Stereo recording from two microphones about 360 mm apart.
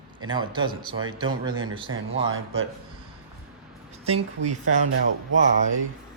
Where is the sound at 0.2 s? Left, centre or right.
Centre.